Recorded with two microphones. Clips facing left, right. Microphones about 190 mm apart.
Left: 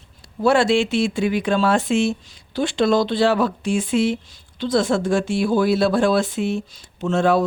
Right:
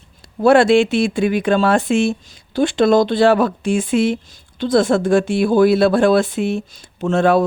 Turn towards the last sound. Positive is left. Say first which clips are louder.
# right 3 dB
turn(degrees=-55)  # may be behind; listen again after turning